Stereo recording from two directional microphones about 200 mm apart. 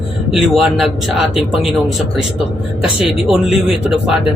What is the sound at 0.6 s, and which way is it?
A man's voice, centre (ahead or behind).